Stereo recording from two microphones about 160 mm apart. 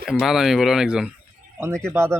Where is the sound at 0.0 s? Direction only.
Centre (ahead or behind).